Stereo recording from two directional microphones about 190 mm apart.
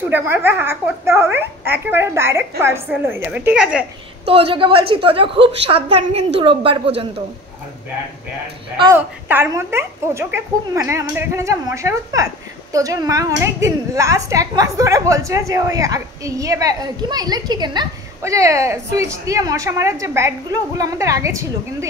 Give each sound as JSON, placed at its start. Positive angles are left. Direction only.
{"t": 0.1, "sound": "a woman's voice", "side_deg": -10}
{"t": 4.3, "sound": "a woman's voice", "side_deg": -30}
{"t": 8.9, "sound": "a woman's voice", "side_deg": -10}